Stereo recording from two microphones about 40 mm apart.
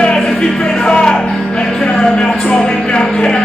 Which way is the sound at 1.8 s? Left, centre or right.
Centre.